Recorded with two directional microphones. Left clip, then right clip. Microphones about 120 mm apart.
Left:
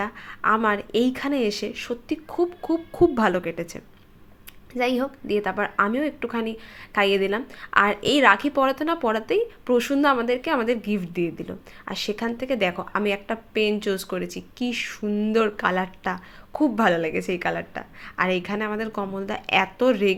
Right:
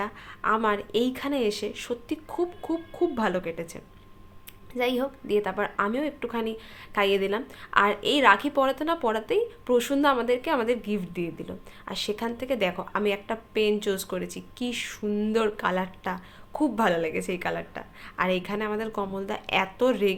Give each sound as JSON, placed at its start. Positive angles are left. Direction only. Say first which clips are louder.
{"t": 0.0, "sound": "a woman's voice", "louder": "left 4 dB", "side_deg": 30}
{"t": 2.9, "sound": "a woman's voice", "louder": "left 7 dB", "side_deg": 40}